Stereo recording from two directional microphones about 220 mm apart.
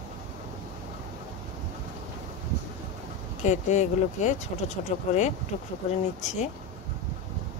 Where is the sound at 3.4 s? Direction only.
30° left (ahead or behind).